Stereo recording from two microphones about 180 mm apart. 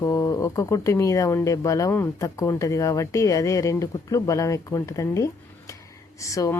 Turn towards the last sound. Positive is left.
turn(degrees=20)  # may be behind; listen again after turning